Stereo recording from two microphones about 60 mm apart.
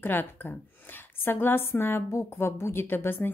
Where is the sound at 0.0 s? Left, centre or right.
Left.